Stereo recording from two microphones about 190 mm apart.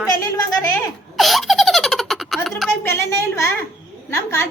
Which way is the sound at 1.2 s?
Centre (ahead or behind).